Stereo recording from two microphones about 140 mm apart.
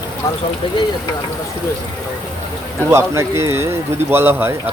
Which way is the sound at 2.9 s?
20° right (ahead or behind).